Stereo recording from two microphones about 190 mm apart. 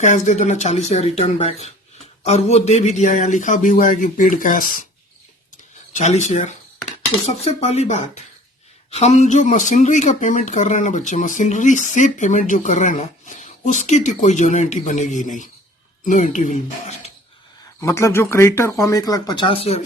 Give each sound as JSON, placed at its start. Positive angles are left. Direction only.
{"t": 0.0, "sound": "speech", "side_deg": 40}
{"t": 5.9, "sound": "speech", "side_deg": 35}
{"t": 6.8, "sound": "cutlery", "side_deg": 35}
{"t": 7.8, "sound": "speech", "side_deg": 35}
{"t": 17.7, "sound": "speech", "side_deg": 15}